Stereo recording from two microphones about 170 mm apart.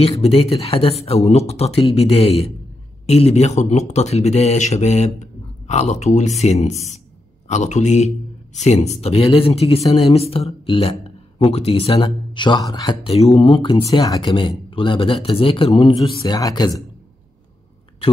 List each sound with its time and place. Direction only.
0.2 s speech: 35° left (ahead or behind)
16.0 s speech: 20° left (ahead or behind)